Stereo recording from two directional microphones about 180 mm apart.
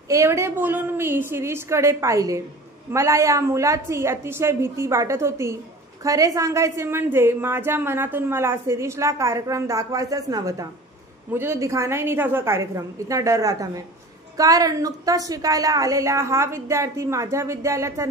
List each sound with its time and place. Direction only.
0.1 s a woman's voice: 15° right (ahead or behind)